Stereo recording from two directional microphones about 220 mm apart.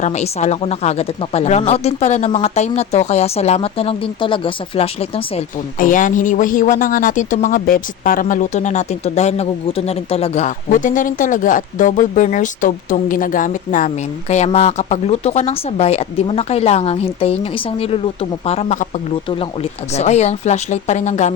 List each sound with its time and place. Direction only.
0.0 s speech: 30° left (ahead or behind)
19.9 s speech: 30° left (ahead or behind)